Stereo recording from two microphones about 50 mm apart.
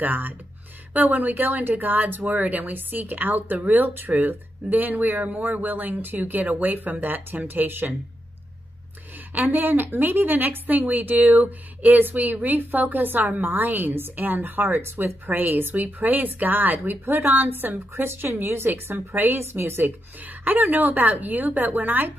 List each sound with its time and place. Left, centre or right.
0.0 s speech: right
9.3 s speech: right
19.8 s speech: right